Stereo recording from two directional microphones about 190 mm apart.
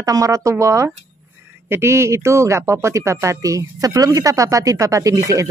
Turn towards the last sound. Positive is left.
turn(degrees=-15)  # may be behind; listen again after turning